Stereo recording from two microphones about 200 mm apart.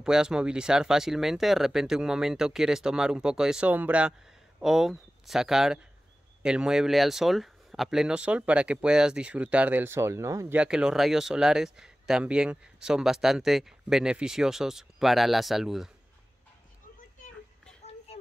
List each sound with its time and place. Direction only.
0.0 s speech: 5° right (ahead or behind)